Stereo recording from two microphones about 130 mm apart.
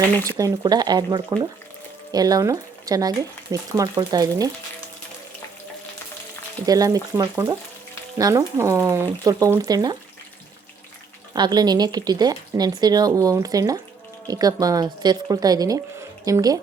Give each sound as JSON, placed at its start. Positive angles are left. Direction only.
{"t": 0.3, "sound": "speech", "side_deg": -25}
{"t": 6.7, "sound": "speech", "side_deg": -25}
{"t": 11.3, "sound": "speech", "side_deg": -35}